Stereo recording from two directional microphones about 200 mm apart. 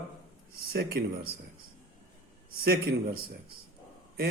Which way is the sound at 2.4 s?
50° right (ahead or behind).